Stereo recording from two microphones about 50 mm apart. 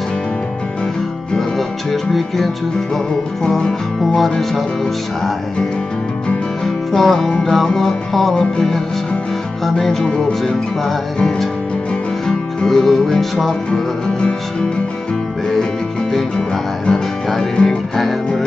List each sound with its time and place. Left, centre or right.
1.9 s music: centre
6.6 s music: centre
7.2 s music: centre
16.1 s music: centre